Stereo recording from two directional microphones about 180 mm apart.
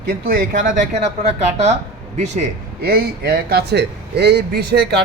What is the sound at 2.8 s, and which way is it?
A man's voice, 60° right (ahead or behind).